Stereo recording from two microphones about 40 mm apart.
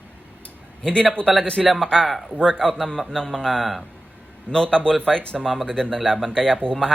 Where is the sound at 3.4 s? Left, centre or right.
Centre.